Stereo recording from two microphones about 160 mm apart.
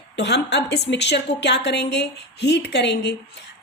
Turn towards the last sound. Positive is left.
turn(degrees=90)